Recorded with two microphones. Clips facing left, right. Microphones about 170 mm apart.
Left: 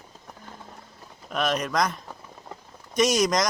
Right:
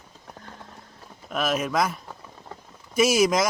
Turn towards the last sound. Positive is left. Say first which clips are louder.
# right 2 dB
turn(degrees=-5)  # may be behind; listen again after turning